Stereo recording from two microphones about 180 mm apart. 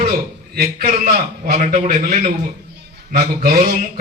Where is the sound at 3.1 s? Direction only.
55° right (ahead or behind).